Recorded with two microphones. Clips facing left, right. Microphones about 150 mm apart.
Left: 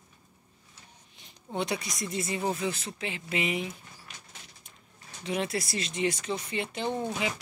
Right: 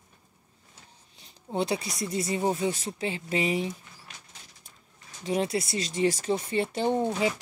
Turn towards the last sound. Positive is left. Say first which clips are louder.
# right 5 dB
turn(degrees=-20)  # may be behind; listen again after turning